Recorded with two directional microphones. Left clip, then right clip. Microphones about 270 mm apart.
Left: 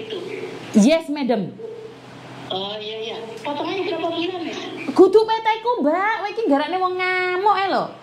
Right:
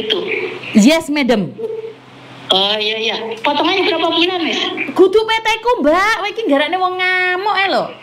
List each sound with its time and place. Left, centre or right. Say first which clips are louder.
0.8 s a woman's voice: right 6 dB; centre
2.4 s a woman's voice: right 13 dB; right
4.9 s speech: right 1 dB; centre
5.4 s a woman's voice: right 5 dB; right
6.5 s a woman's voice: right 6 dB; centre